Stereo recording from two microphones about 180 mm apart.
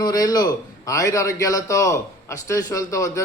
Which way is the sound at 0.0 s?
20° left (ahead or behind).